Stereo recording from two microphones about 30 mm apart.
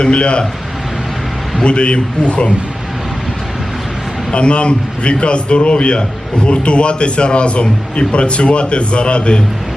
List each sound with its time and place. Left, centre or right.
0.0 s a man's voice: left
1.6 s a man's voice: left
4.4 s a man's voice: left